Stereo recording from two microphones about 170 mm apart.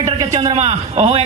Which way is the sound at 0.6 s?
40° right (ahead or behind).